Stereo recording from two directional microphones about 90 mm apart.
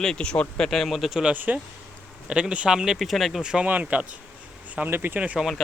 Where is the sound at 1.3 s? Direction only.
20° right (ahead or behind).